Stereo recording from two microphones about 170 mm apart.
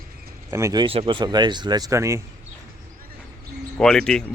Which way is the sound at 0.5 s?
20° right (ahead or behind).